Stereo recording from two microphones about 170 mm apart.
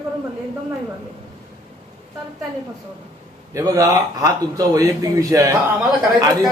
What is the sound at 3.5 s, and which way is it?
A man's voice, 20° right (ahead or behind).